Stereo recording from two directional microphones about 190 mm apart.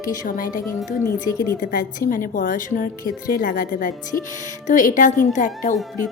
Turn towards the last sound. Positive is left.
turn(degrees=40)  # may be behind; listen again after turning